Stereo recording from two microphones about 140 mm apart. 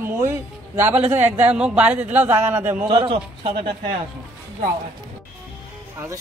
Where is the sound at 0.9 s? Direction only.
50° right (ahead or behind).